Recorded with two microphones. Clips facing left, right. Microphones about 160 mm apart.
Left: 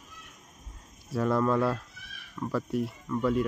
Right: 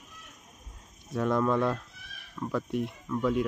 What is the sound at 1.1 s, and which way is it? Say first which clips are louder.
Speech: left 1 dB; centre (ahead or behind).